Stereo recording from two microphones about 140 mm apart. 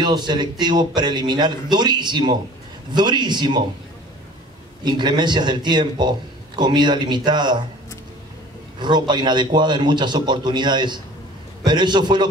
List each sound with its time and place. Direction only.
0.0 s a man's voice: 30° right (ahead or behind)
4.8 s a man's voice: 30° right (ahead or behind)
8.7 s a man's voice: 35° right (ahead or behind)